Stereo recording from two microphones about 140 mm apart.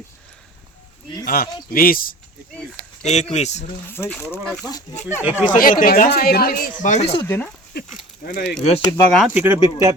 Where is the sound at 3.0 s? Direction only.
55° left (ahead or behind).